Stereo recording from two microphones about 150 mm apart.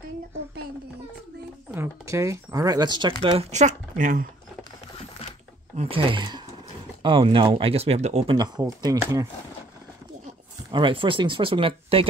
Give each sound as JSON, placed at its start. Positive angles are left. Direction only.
{"t": 1.7, "sound": "speech", "side_deg": -15}
{"t": 5.8, "sound": "speech", "side_deg": -35}
{"t": 8.4, "sound": "speech", "side_deg": -25}
{"t": 10.7, "sound": "speech", "side_deg": -35}